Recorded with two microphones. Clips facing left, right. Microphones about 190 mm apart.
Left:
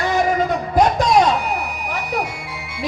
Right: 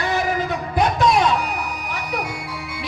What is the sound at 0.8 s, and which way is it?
Music, 45° left (ahead or behind).